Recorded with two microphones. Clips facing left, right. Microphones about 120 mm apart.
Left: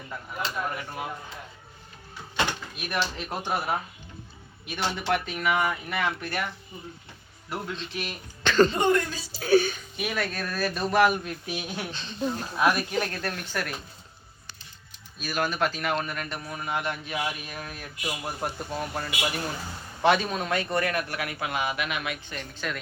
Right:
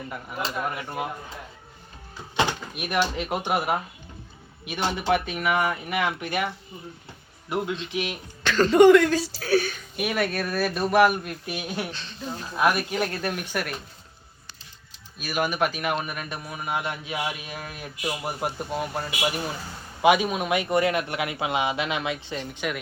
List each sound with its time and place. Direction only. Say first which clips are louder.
2.3 s a man's voice: right 4 dB; 20° right (ahead or behind)
7.5 s a man's voice: right 6 dB; 15° right (ahead or behind)
8.7 s speech: right 10 dB; 90° right
9.4 s speech: left 5 dB; 10° left (ahead or behind)
10.0 s a man's voice: right 5 dB; 5° right (ahead or behind)
15.2 s a man's voice: right 2 dB; 10° right (ahead or behind)